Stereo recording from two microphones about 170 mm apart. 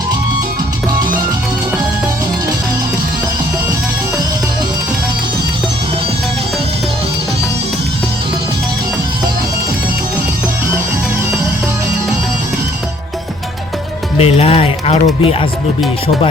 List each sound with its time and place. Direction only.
14.2 s speech: 35° left (ahead or behind)